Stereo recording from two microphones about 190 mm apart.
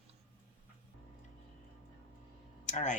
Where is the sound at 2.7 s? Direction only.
40° left (ahead or behind).